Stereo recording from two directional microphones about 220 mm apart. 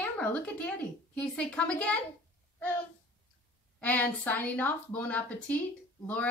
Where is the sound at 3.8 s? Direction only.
5° left (ahead or behind).